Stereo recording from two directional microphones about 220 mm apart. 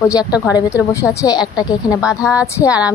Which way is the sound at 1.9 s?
5° right (ahead or behind).